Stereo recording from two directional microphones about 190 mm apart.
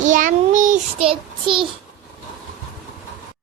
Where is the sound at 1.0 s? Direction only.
25° right (ahead or behind).